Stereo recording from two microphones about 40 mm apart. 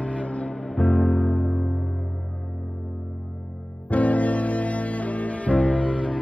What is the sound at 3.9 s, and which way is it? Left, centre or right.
Music, left.